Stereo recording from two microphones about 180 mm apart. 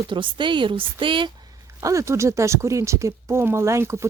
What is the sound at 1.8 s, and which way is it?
Speech, 15° right (ahead or behind).